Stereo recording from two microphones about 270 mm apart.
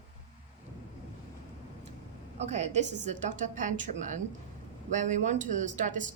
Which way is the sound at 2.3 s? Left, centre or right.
Right.